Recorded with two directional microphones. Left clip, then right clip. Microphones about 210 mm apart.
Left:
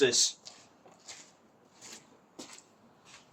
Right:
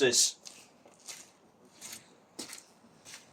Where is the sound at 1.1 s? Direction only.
30° right (ahead or behind).